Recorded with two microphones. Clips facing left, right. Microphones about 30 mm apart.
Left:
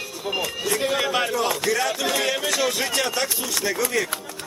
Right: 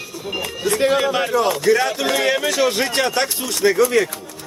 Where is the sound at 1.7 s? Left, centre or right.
Centre.